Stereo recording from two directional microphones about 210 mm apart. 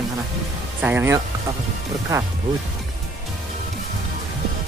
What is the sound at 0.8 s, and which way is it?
Speech, 10° right (ahead or behind).